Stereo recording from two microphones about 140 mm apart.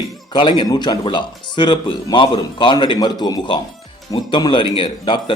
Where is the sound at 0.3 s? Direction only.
35° left (ahead or behind).